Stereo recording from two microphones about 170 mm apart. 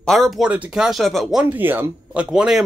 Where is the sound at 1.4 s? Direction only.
10° right (ahead or behind).